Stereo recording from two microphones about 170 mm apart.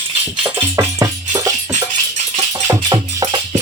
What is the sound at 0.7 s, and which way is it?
Music, 20° right (ahead or behind).